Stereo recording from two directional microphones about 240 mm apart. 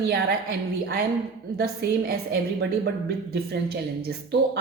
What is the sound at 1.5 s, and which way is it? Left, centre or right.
Speech, right.